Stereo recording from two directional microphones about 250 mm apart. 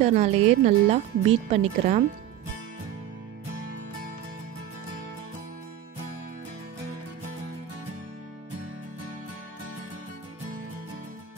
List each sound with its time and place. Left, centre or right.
0.0 s speech: right